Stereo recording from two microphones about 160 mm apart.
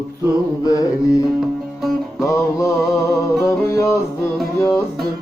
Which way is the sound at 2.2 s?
20° left (ahead or behind).